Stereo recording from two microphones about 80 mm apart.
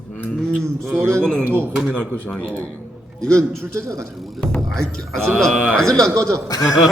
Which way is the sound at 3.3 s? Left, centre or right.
Right.